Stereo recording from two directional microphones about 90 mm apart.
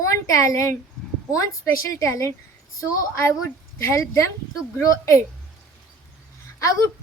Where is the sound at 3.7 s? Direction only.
30° left (ahead or behind).